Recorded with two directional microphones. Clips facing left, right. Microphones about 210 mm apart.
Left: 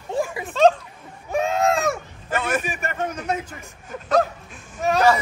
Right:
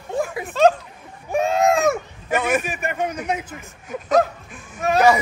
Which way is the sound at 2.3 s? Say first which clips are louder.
Right 3 dB; 15° right (ahead or behind).